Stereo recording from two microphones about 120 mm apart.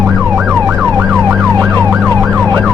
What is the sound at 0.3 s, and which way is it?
Emergency vehicle, 5° right (ahead or behind).